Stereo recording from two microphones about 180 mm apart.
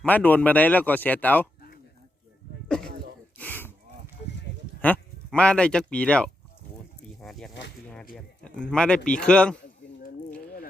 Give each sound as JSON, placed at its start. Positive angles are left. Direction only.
{"t": 0.0, "sound": "speech", "side_deg": 10}
{"t": 2.6, "sound": "speech", "side_deg": 5}
{"t": 3.3, "sound": "a sound", "side_deg": 10}
{"t": 4.8, "sound": "speech", "side_deg": 5}
{"t": 7.2, "sound": "snake", "side_deg": 0}
{"t": 8.1, "sound": "speech", "side_deg": 5}